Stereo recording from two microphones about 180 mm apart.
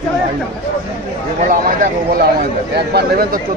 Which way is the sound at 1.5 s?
55° right (ahead or behind).